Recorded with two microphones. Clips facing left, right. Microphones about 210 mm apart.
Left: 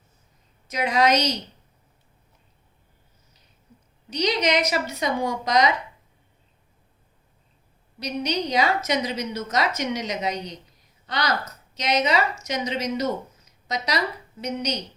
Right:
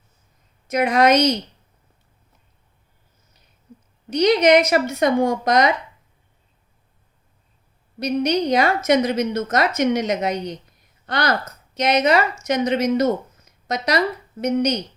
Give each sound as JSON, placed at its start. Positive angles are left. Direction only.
{"t": 0.7, "sound": "speech", "side_deg": -55}
{"t": 4.1, "sound": "a woman's voice", "side_deg": -55}
{"t": 7.9, "sound": "a woman's voice", "side_deg": -55}